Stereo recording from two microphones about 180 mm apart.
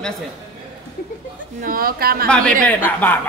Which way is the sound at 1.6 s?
55° right (ahead or behind).